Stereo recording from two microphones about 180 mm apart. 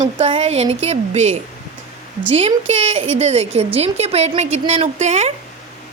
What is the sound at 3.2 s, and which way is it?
Speech, 35° right (ahead or behind).